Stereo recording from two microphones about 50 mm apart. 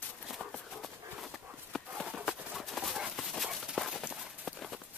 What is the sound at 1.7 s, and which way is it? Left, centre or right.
Run, centre.